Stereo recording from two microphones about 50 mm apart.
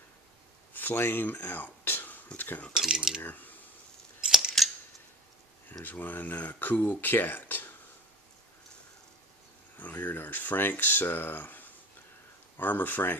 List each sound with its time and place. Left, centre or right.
0.7 s a sound: left
2.3 s speech: left
2.9 s coin: centre
3.2 s speech: left
4.6 s a sound: centre
5.7 s speech: left
9.8 s speech: left